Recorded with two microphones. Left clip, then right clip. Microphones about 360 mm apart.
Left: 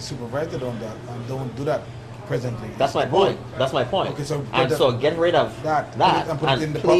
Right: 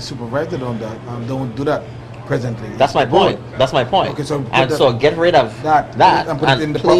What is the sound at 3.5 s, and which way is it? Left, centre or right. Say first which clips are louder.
Speech: right 8 dB; right.